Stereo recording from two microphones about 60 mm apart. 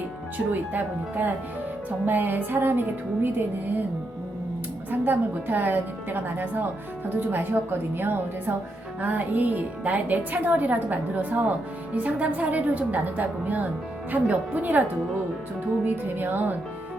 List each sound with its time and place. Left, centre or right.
0.5 s a woman's voice: right
4.9 s a woman's voice: right